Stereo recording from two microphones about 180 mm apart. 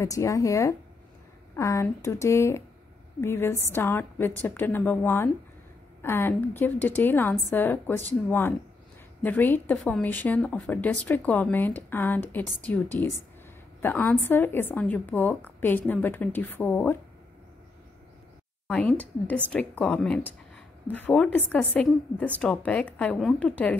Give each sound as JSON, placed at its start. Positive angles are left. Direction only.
{"t": 0.0, "sound": "speech", "side_deg": 15}
{"t": 18.7, "sound": "speech", "side_deg": 5}